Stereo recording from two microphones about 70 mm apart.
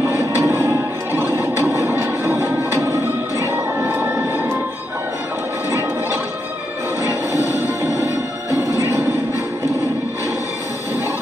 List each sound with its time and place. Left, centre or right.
0.0 s music: right
3.9 s music: right
8.7 s music: right